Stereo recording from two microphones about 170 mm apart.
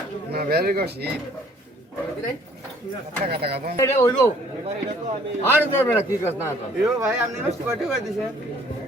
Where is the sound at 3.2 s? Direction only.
70° right (ahead or behind).